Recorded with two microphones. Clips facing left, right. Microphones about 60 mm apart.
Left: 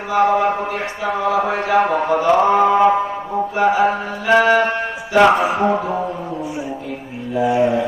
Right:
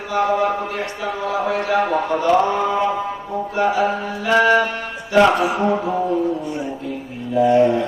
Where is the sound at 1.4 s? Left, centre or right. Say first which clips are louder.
Left 2 dB; left.